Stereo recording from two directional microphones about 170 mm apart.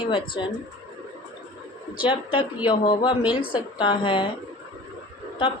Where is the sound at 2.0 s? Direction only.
30° left (ahead or behind).